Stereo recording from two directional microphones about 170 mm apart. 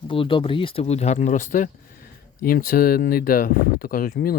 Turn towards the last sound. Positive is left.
turn(degrees=60)  # may be behind; listen again after turning